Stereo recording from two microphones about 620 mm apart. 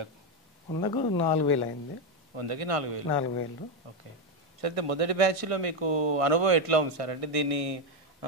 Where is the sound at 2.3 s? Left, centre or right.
Right.